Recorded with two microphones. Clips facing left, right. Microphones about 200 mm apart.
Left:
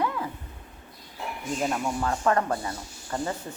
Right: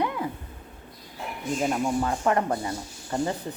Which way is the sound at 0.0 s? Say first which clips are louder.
Right 1 dB; 20° right (ahead or behind).